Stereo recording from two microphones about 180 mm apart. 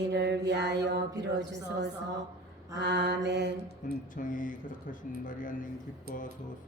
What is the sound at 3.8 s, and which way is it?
Mantra, 45° left (ahead or behind).